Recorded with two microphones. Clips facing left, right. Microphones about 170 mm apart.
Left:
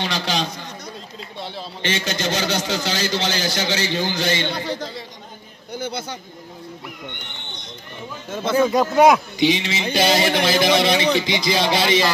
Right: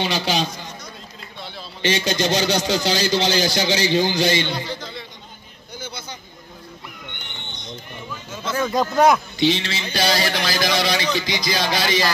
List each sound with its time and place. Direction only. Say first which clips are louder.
0.0 s speech: right 2 dB; 5° right (ahead or behind)
1.9 s speech: right 4 dB; 15° right (ahead or behind)
5.8 s speech: left 7 dB; 65° left (ahead or behind)
8.3 s speech: left 6 dB; 55° left (ahead or behind)
8.5 s a man's voice: left 3 dB; 10° left (ahead or behind)